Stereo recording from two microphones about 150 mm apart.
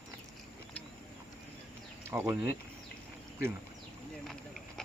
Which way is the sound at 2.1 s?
15° right (ahead or behind).